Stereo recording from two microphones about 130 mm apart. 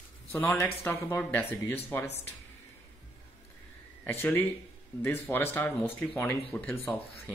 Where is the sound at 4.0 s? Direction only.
15° left (ahead or behind).